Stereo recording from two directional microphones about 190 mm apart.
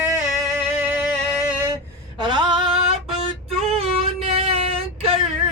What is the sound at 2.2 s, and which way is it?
Female singing, 25° right (ahead or behind).